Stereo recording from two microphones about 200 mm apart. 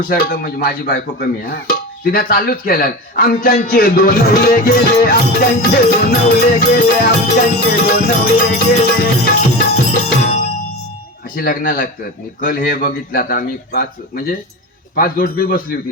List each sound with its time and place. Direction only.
0.1 s speech: 50° left (ahead or behind)
11.3 s speech: 45° left (ahead or behind)
14.9 s speech: 45° left (ahead or behind)